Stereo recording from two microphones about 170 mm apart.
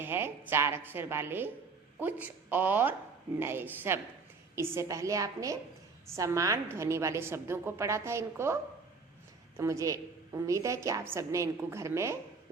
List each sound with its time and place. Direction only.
0.0 s a woman's voice: 15° right (ahead or behind)
9.6 s a woman's voice: 15° right (ahead or behind)